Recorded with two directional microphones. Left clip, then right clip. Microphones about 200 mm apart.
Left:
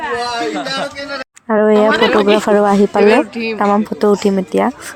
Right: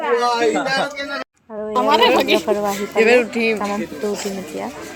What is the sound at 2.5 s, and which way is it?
Speech, 35° left (ahead or behind).